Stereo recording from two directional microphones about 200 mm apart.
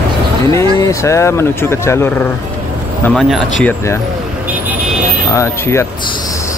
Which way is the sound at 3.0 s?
Centre (ahead or behind).